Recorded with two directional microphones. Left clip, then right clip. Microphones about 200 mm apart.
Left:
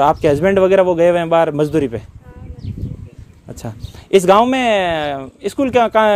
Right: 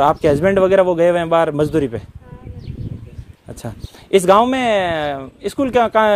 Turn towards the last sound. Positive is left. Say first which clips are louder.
# left 1 dB
turn(degrees=25)  # may be behind; listen again after turning